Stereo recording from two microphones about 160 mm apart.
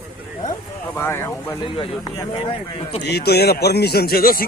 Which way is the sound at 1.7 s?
35° left (ahead or behind).